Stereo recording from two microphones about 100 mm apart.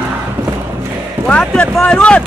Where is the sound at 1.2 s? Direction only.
10° left (ahead or behind).